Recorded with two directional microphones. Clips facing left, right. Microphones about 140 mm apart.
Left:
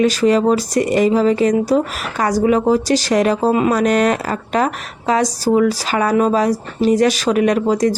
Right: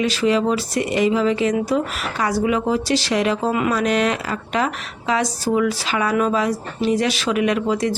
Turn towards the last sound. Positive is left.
turn(degrees=40)  # may be behind; listen again after turning